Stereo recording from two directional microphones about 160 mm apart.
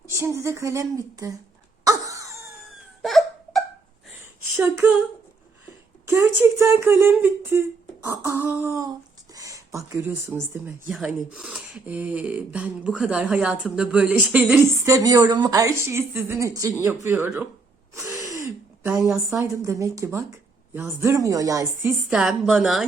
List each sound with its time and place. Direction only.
0.2 s a woman's voice: 15° right (ahead or behind)
1.8 s cough: 20° right (ahead or behind)
3.0 s hiccup: centre (ahead or behind)
4.5 s speech: 15° right (ahead or behind)
6.1 s speech: 15° right (ahead or behind)
10.9 s speech: 5° right (ahead or behind)
14.8 s a woman's voice: 20° right (ahead or behind)
17.9 s gasp: 20° right (ahead or behind)
19.0 s a woman's voice: centre (ahead or behind)
19.4 s a woman's voice: 20° right (ahead or behind); by 22.9 s centre (ahead or behind)